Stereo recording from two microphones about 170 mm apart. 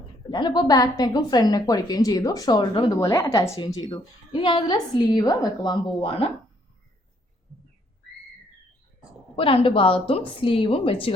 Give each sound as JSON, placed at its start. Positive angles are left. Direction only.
{"t": 0.3, "sound": "a woman's voice", "side_deg": 25}
{"t": 2.9, "sound": "a woman's voice", "side_deg": 20}
{"t": 9.3, "sound": "a woman's voice", "side_deg": 30}